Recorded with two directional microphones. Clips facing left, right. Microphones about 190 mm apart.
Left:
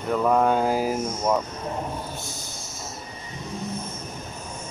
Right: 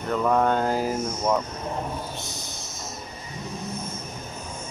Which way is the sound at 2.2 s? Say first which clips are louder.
Even; 25° left (ahead or behind).